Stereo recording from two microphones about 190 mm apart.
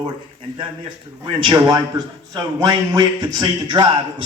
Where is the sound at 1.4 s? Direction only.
20° right (ahead or behind).